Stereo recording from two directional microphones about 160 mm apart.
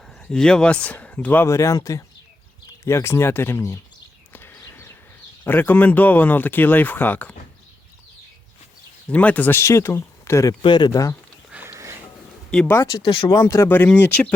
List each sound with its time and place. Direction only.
0.3 s speech: 5° left (ahead or behind)
4.3 s a sound: 15° left (ahead or behind)
5.5 s speech: 10° left (ahead or behind)
9.0 s speech: 10° left (ahead or behind)
10.6 s speech: 30° left (ahead or behind)
11.5 s a sound: 15° right (ahead or behind)
12.5 s speech: 5° left (ahead or behind)
12.9 s speech: 30° left (ahead or behind); by 14.3 s 10° left (ahead or behind)